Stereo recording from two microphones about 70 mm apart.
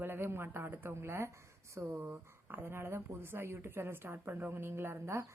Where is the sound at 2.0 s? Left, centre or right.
Right.